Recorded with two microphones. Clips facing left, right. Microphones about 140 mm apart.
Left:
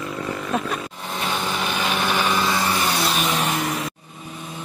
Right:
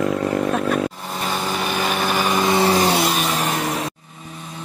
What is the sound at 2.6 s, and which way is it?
Vehicle, 30° right (ahead or behind).